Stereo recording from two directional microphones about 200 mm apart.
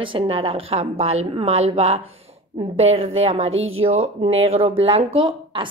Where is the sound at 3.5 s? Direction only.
80° right.